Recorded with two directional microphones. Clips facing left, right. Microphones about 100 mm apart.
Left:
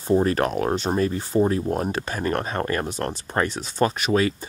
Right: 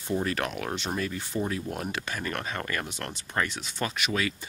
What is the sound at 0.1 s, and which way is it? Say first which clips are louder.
Speech: left 9 dB; 35° left (ahead or behind).